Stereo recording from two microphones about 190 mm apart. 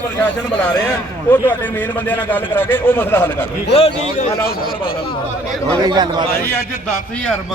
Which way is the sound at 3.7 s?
30° left (ahead or behind).